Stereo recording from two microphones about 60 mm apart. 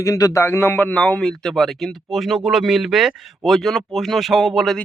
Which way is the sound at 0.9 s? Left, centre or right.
Centre.